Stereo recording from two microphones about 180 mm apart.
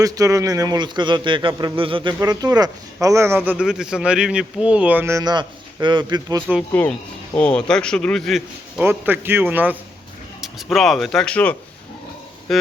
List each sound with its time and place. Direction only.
0.0 s a man's voice: 20° right (ahead or behind)
6.7 s a man's voice: 10° left (ahead or behind)
8.8 s a man's voice: 10° right (ahead or behind); by 11.5 s 5° left (ahead or behind)
12.5 s a sound: centre (ahead or behind)